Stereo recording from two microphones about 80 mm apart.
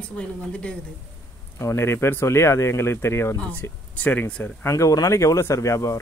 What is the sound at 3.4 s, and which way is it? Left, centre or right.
Speech, centre.